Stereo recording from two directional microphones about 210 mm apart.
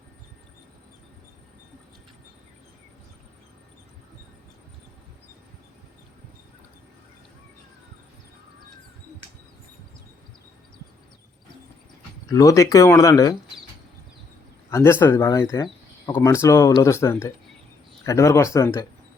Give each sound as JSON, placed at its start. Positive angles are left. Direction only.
{"t": 12.3, "sound": "speech", "side_deg": 15}
{"t": 14.7, "sound": "speech", "side_deg": 10}